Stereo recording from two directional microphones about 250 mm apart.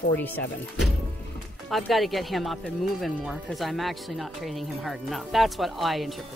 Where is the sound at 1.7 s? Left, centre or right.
Centre.